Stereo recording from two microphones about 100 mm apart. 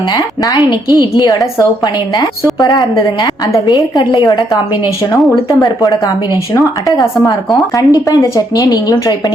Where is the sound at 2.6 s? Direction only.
35° left (ahead or behind).